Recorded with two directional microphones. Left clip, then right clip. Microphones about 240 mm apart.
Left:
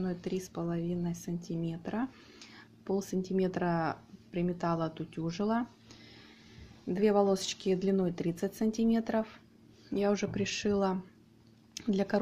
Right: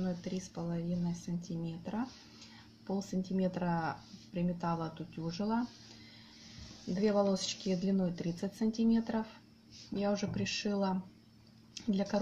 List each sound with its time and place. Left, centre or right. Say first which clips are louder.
0.0 s speech: left 4 dB; left
7.0 s speech: left 4 dB; left